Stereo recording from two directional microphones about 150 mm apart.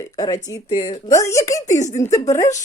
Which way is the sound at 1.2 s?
20° left (ahead or behind).